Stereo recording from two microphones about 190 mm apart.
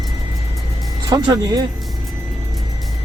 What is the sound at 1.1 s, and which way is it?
Speech, 20° right (ahead or behind).